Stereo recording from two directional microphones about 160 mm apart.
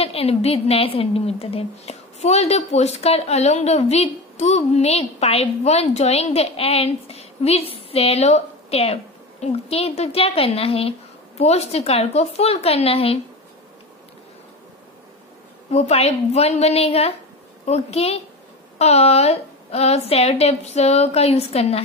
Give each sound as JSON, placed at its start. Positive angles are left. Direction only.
{"t": 0.0, "sound": "a woman's voice", "side_deg": 40}
{"t": 15.7, "sound": "a woman's voice", "side_deg": 45}